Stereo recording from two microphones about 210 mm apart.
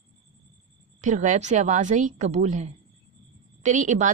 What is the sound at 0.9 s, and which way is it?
A woman's voice, 35° right (ahead or behind).